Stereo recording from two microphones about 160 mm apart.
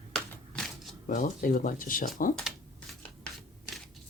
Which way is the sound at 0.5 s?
Centre (ahead or behind).